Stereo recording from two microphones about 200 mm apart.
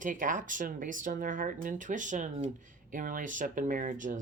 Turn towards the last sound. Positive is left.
turn(degrees=-40)  # may be behind; listen again after turning